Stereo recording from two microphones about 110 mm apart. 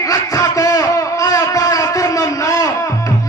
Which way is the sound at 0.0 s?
30° left (ahead or behind).